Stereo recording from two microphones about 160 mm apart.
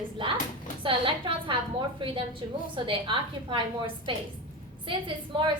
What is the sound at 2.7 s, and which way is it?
A woman's voice, 30° right (ahead or behind).